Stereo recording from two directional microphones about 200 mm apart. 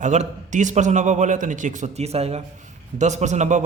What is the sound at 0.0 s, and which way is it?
A man's voice, 35° right (ahead or behind).